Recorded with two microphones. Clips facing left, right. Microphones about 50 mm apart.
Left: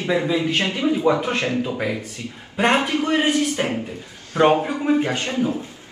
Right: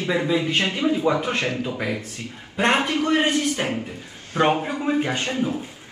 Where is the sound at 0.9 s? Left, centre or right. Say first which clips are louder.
Left 4 dB; centre.